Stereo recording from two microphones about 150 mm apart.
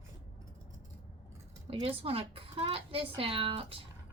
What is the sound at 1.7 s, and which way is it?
A woman's voice, 40° right (ahead or behind).